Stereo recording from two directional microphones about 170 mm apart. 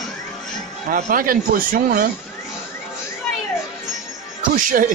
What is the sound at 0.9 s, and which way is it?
Speech, 55° right (ahead or behind).